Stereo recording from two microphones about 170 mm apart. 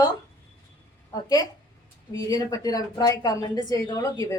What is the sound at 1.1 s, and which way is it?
A woman's voice, 20° left (ahead or behind).